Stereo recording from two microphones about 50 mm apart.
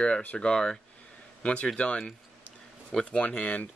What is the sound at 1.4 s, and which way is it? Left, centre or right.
Speech, left.